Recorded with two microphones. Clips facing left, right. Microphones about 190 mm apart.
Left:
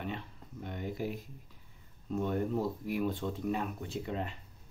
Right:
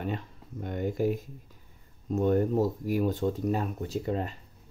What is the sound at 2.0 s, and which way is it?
Speech, 40° right (ahead or behind).